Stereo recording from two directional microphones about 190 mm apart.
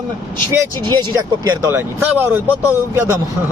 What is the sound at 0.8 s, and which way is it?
Speech, 20° right (ahead or behind).